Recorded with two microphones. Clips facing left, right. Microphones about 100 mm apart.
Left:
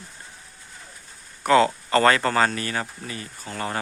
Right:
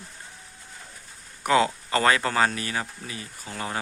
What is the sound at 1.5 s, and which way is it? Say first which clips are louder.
Speech: left 4 dB; 10° right (ahead or behind).